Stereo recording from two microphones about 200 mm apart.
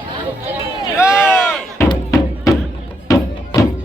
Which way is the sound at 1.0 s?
15° left (ahead or behind).